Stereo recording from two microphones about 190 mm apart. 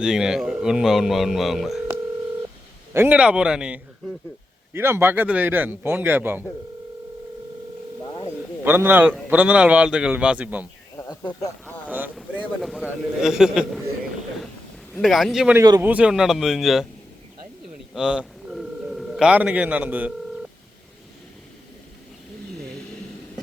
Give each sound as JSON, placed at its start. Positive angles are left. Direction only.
{"t": 0.0, "sound": "speech", "side_deg": -5}
{"t": 2.9, "sound": "a man's voice", "side_deg": -10}
{"t": 8.6, "sound": "a man's voice", "side_deg": -10}
{"t": 10.9, "sound": "a sound", "side_deg": 20}
{"t": 11.9, "sound": "a man's voice", "side_deg": -10}
{"t": 14.9, "sound": "speech", "side_deg": 0}
{"t": 17.9, "sound": "telephone", "side_deg": -5}